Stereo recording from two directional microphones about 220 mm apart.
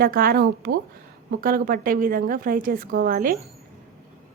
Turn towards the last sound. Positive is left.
turn(degrees=-40)  # may be behind; listen again after turning